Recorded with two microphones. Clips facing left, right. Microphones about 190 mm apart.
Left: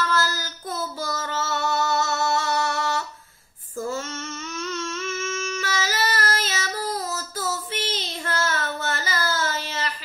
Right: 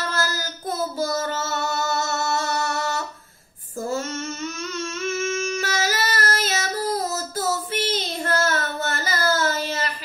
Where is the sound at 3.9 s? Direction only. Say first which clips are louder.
Right 6 dB; 40° right (ahead or behind).